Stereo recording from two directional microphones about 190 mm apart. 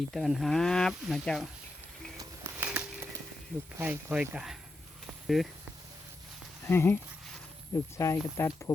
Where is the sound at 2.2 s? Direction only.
10° right (ahead or behind).